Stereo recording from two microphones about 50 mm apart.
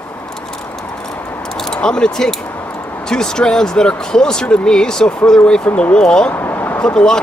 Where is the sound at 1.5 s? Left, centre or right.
Centre.